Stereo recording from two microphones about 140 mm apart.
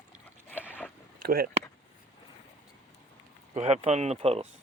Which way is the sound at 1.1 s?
90° right.